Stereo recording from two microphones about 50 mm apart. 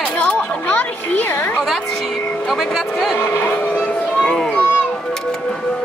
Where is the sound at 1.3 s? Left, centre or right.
Left.